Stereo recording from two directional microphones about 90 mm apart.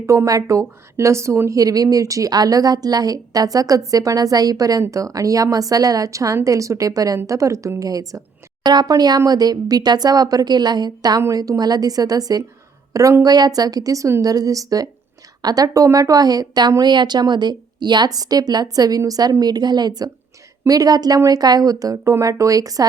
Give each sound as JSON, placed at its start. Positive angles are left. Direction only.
{"t": 0.0, "sound": "a woman's voice", "side_deg": -35}